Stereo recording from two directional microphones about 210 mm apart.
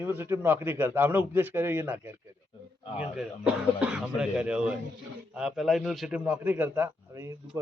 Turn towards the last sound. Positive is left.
turn(degrees=-10)  # may be behind; listen again after turning